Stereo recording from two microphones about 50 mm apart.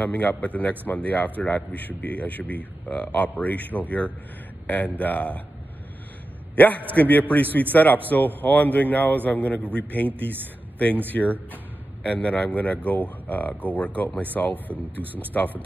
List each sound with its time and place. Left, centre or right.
0.0 s a man's voice: left
6.5 s a man's voice: left